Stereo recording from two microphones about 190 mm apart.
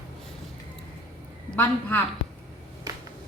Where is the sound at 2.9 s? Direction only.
20° right (ahead or behind).